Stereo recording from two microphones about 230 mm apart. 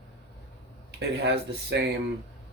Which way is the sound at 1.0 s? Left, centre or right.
Right.